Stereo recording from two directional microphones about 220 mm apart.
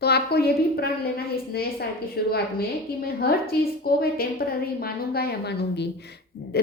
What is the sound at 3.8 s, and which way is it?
A woman's voice, 45° left (ahead or behind).